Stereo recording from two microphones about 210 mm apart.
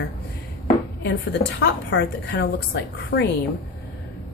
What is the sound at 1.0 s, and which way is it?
A woman's voice, 55° left (ahead or behind).